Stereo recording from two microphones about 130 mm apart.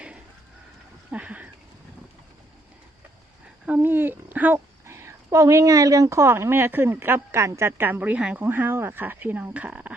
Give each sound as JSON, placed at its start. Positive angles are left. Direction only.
{"t": 1.1, "sound": "speech", "side_deg": -10}
{"t": 3.7, "sound": "speech", "side_deg": -15}